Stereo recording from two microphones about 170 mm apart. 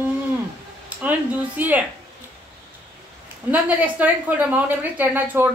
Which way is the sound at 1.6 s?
10° right (ahead or behind).